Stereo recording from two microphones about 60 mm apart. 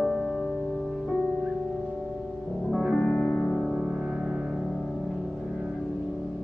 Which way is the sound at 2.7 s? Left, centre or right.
Centre.